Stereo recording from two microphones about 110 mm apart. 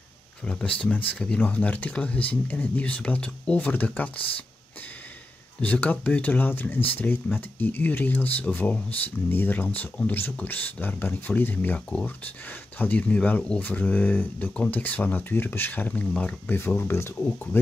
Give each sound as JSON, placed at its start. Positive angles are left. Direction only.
{"t": 0.5, "sound": "speech", "side_deg": 10}
{"t": 5.6, "sound": "speech", "side_deg": 15}